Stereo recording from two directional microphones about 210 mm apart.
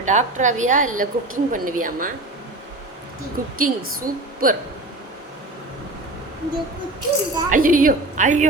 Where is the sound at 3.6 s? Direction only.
40° right (ahead or behind).